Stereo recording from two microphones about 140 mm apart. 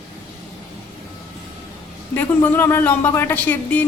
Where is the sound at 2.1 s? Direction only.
15° left (ahead or behind).